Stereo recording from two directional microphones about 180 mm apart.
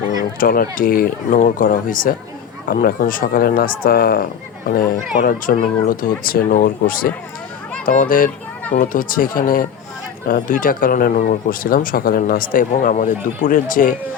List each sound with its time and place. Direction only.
0.3 s speech: 55° left (ahead or behind)